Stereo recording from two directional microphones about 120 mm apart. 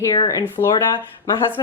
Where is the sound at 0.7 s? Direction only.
35° left (ahead or behind).